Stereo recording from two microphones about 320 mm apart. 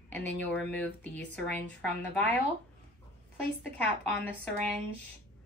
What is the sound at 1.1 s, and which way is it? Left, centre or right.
Speech, right.